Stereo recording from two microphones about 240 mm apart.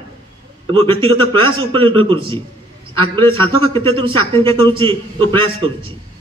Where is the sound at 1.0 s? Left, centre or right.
Right.